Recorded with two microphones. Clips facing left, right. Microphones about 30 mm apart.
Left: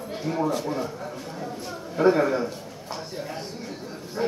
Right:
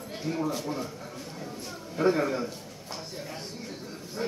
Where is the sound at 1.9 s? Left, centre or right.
Centre.